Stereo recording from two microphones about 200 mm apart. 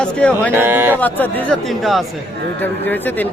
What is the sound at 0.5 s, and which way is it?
Speech, 10° right (ahead or behind).